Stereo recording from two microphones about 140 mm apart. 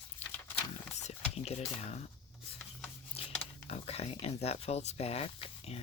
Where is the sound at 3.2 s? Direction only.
45° left (ahead or behind).